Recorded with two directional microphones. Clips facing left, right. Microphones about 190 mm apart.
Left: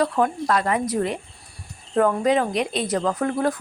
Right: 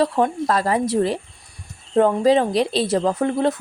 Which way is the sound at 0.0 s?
30° right (ahead or behind).